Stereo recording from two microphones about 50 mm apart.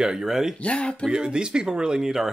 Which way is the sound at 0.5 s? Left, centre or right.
Left.